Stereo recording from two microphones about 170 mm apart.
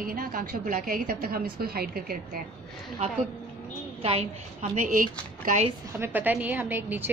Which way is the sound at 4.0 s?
35° right (ahead or behind).